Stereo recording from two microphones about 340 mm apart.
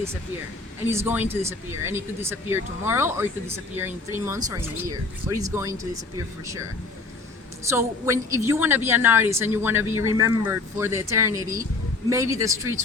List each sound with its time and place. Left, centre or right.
0.9 s speech: centre
7.7 s speech: centre